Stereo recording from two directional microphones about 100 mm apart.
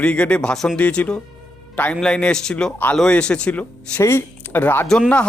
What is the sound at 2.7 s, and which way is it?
Speech, 15° left (ahead or behind).